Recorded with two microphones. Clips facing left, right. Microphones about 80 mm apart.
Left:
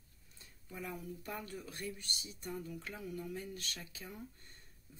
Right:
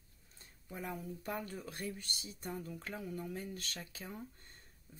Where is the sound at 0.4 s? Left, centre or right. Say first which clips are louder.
Right 1 dB; right.